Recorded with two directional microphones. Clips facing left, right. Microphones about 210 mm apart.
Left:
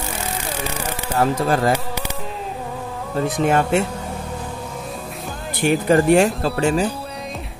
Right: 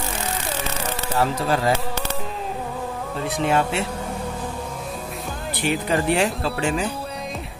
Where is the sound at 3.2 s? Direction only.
50° left (ahead or behind).